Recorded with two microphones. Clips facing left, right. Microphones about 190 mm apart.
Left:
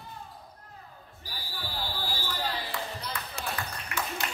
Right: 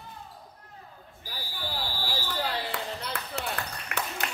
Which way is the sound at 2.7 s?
70° right (ahead or behind).